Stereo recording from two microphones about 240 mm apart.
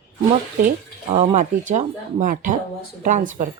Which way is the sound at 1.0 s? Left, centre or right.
Right.